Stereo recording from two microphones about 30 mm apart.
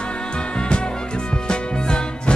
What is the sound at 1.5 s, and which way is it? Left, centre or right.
Music, left.